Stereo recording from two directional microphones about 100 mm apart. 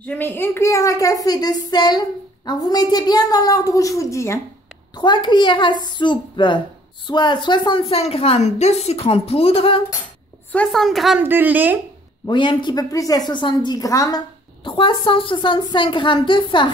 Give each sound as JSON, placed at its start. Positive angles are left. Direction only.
{"t": 0.0, "sound": "a woman's voice", "side_deg": 20}
{"t": 4.9, "sound": "a woman's voice", "side_deg": 45}
{"t": 7.9, "sound": "a woman's voice", "side_deg": 75}
{"t": 10.5, "sound": "a woman's voice", "side_deg": 10}
{"t": 10.8, "sound": "a woman's voice", "side_deg": 0}
{"t": 11.1, "sound": "speech", "side_deg": -20}
{"t": 12.3, "sound": "a woman's voice", "side_deg": 50}
{"t": 12.9, "sound": "a woman's voice", "side_deg": 35}
{"t": 14.6, "sound": "a woman's voice", "side_deg": 60}